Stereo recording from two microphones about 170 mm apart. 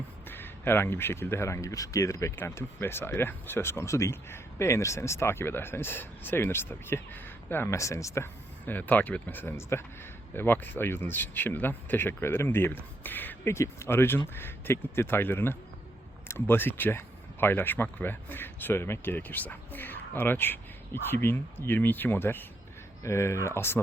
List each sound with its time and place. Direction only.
0.3 s speech: 10° left (ahead or behind)